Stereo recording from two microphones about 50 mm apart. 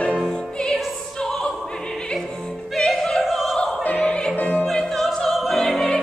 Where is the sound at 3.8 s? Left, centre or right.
Left.